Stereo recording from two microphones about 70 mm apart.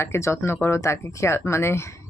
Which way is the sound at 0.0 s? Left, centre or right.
Left.